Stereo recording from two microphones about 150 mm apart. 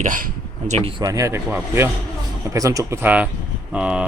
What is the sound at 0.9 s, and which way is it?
Speech, 25° right (ahead or behind).